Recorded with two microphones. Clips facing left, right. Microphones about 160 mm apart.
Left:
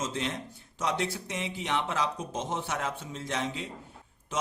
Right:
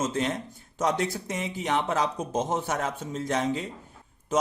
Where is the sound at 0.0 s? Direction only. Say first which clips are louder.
Right 5 dB; 45° right (ahead or behind).